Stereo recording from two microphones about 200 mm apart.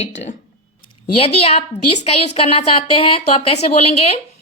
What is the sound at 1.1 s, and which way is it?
A woman's voice, 30° left (ahead or behind).